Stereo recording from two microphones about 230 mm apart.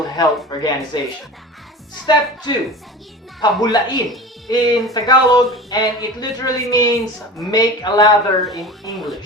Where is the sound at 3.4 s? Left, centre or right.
Centre.